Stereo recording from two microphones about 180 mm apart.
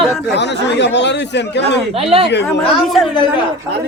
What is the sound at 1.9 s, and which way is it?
Speech, 30° right (ahead or behind).